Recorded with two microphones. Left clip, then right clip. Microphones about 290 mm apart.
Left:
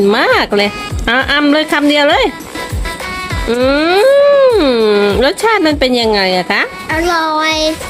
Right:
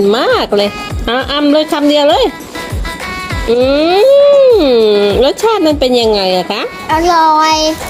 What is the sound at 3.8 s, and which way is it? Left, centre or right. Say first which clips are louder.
Speech: right 1 dB; left.